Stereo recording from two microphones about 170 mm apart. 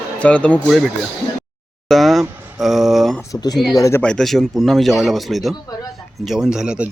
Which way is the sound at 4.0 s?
5° left (ahead or behind).